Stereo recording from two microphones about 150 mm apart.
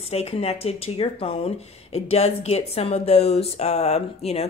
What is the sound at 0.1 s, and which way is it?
Speech, 40° left (ahead or behind).